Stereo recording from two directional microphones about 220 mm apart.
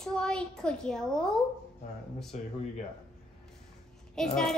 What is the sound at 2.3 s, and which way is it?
Speech, 30° left (ahead or behind).